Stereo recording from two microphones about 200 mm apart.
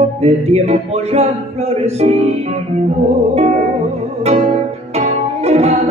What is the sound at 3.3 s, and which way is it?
Music, 35° right (ahead or behind).